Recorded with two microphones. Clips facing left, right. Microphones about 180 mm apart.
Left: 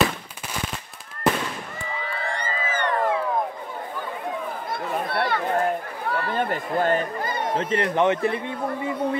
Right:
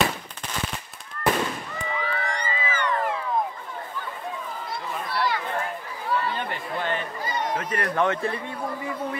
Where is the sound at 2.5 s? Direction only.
45° left (ahead or behind).